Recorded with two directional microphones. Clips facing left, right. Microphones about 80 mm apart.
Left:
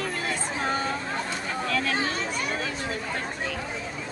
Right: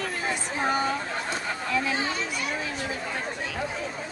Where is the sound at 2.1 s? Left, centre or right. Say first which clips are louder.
Left 1 dB; left.